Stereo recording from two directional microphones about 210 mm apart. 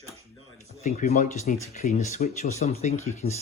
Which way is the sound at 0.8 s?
35° left (ahead or behind).